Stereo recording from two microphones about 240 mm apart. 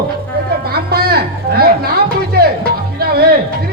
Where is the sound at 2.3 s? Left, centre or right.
Right.